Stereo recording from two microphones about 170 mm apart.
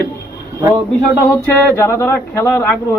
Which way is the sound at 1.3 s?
15° left (ahead or behind).